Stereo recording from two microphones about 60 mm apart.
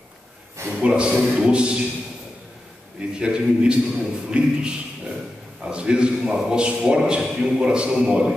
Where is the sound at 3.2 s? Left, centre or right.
Centre.